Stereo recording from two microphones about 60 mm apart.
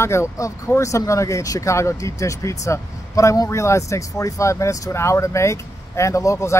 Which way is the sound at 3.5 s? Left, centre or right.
Left.